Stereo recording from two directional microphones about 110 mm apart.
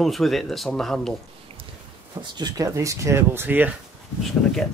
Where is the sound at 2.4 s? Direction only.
35° right (ahead or behind); by 3.8 s 15° right (ahead or behind).